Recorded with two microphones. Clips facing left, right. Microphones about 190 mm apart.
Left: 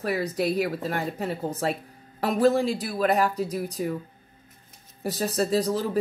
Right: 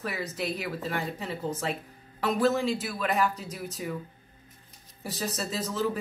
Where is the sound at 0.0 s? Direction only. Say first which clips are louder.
Left 7 dB; 40° left (ahead or behind).